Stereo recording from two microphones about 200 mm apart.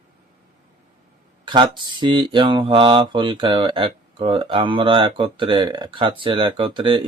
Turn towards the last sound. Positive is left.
turn(degrees=-25)  # may be behind; listen again after turning